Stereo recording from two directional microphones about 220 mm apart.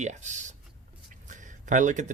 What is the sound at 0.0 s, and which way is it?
Speech, 35° right (ahead or behind).